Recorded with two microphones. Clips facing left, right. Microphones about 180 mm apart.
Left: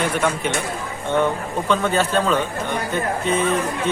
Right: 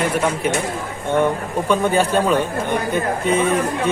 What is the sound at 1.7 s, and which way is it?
Speech, 10° right (ahead or behind).